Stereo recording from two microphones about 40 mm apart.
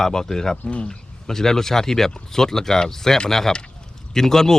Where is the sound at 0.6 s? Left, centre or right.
Left.